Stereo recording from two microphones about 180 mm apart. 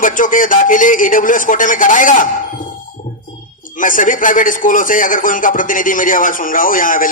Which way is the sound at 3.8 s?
45° left (ahead or behind).